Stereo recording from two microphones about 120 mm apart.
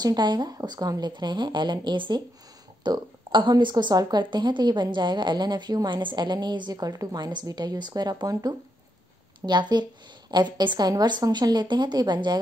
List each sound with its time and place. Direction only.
0.0 s a woman's voice: 35° right (ahead or behind)